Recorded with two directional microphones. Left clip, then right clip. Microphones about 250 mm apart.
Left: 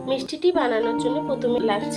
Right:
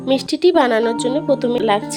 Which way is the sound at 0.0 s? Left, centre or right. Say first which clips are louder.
Right 7 dB; right.